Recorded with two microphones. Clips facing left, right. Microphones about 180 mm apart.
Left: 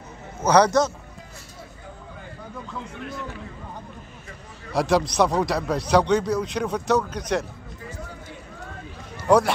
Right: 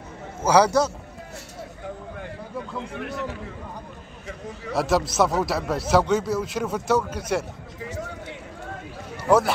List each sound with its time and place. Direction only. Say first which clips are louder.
0.4 s a man's voice: left 1 dB; 10° right (ahead or behind)
3.0 s a man's voice: right 5 dB; 70° right (ahead or behind)
4.7 s a man's voice: left 1 dB; 5° right (ahead or behind)
7.9 s a sound: right 6 dB; 90° right